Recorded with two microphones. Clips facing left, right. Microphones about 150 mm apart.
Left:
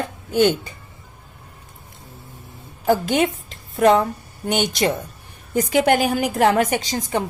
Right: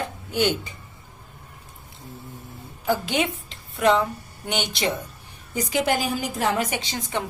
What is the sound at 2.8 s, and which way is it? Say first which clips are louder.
A woman's voice: left 6 dB; 45° left (ahead or behind).